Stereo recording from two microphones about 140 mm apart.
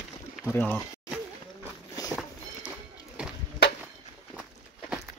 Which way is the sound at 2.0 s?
25° left (ahead or behind).